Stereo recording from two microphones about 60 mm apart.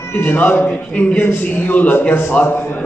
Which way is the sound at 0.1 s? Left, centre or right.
Left.